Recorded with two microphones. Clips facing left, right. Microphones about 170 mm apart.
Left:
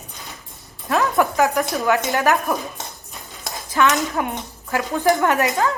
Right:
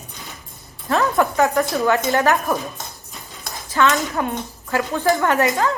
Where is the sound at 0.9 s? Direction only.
15° left (ahead or behind).